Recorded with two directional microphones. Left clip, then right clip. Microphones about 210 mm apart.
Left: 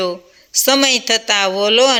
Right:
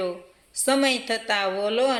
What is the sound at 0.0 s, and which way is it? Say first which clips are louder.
A man's voice: left 8 dB; 40° left (ahead or behind).